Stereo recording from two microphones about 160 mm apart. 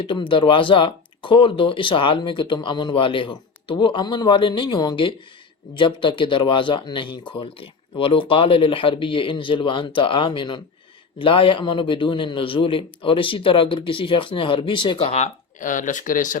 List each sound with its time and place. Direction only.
0.0 s a man's voice: 30° left (ahead or behind); by 16.4 s 55° left (ahead or behind)